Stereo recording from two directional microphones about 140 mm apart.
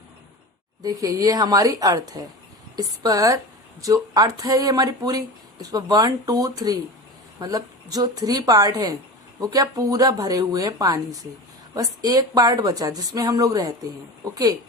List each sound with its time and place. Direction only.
0.8 s a woman's voice: 25° right (ahead or behind)